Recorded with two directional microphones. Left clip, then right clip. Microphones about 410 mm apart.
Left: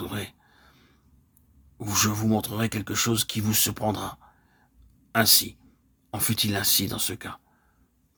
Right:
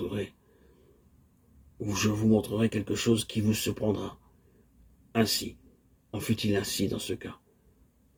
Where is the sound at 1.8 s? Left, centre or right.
Left.